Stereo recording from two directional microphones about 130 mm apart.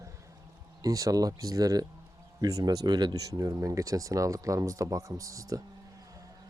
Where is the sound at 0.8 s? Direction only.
25° right (ahead or behind).